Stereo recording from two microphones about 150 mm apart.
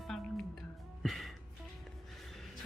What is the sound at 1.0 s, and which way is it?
Music, centre (ahead or behind).